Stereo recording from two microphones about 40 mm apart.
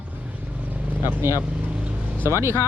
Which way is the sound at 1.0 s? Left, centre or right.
Right.